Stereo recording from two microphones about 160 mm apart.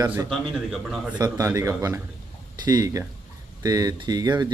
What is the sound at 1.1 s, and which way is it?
A man's voice, 20° right (ahead or behind).